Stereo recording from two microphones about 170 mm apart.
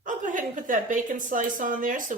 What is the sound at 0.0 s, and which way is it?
A woman's voice, 50° right (ahead or behind).